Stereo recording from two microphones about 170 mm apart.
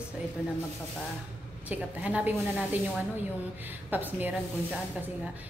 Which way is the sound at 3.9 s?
10° right (ahead or behind).